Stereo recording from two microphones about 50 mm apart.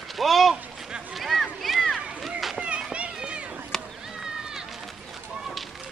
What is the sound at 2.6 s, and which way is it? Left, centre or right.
Children playing, right.